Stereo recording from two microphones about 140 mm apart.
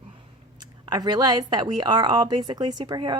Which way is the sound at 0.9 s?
30° right (ahead or behind).